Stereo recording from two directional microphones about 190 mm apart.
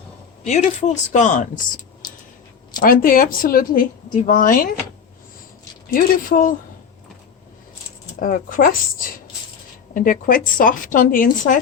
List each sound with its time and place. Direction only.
0.4 s speech: 35° left (ahead or behind)
2.8 s a woman's voice: 50° left (ahead or behind)
5.9 s a woman's voice: 50° left (ahead or behind)
8.2 s a woman's voice: 45° left (ahead or behind)